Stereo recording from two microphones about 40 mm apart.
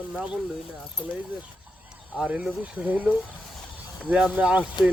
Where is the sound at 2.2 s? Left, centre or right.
Right.